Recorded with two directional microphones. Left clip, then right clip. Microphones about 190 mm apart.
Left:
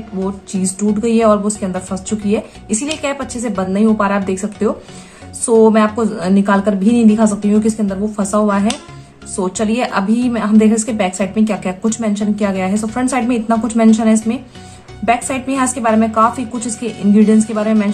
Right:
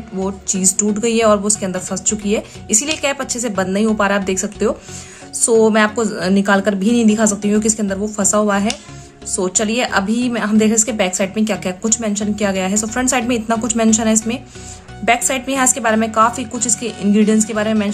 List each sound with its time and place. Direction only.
0.2 s a woman's voice: 30° right (ahead or behind)